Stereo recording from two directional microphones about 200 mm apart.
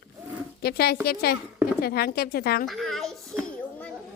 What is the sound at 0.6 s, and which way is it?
Speech, 50° left (ahead or behind).